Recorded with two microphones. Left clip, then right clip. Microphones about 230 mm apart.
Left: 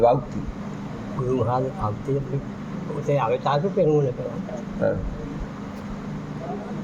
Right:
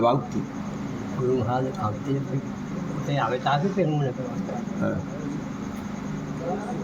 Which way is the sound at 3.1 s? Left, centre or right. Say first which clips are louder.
Left 1 dB; left.